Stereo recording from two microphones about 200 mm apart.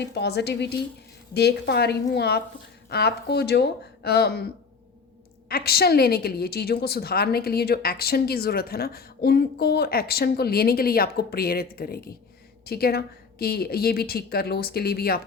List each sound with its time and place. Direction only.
0.0 s speech: 55° left (ahead or behind)
5.5 s a woman's voice: 50° left (ahead or behind)